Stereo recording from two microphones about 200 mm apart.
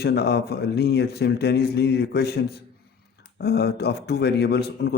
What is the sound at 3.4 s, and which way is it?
A man's voice, 55° left (ahead or behind).